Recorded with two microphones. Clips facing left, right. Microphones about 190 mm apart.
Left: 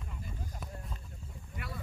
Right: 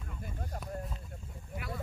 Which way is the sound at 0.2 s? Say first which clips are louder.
Right 5 dB; 60° right (ahead or behind).